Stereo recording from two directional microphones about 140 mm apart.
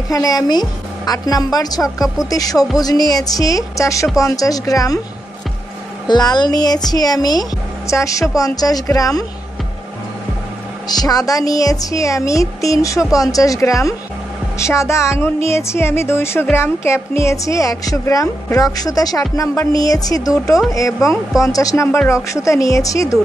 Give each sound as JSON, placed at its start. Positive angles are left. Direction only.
{"t": 0.1, "sound": "speech", "side_deg": 25}
{"t": 6.0, "sound": "speech", "side_deg": 30}
{"t": 10.9, "sound": "speech", "side_deg": 25}